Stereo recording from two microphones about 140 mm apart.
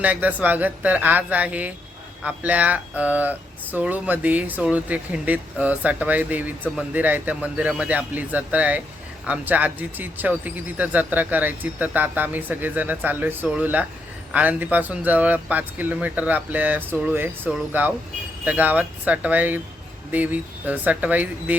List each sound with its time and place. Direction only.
0.0 s speech: 10° right (ahead or behind)